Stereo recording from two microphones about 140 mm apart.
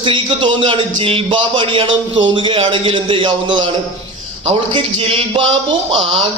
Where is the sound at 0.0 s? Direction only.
40° right (ahead or behind).